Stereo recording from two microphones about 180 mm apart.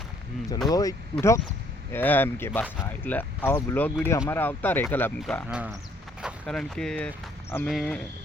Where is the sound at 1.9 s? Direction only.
10° left (ahead or behind).